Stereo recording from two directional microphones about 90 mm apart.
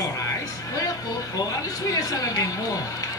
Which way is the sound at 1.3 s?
45° left (ahead or behind).